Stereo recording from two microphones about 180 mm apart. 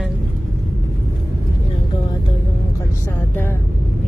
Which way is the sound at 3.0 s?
10° left (ahead or behind).